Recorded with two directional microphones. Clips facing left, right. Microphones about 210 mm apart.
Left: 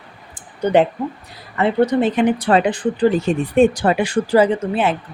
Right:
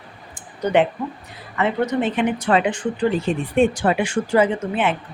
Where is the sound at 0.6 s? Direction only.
30° left (ahead or behind).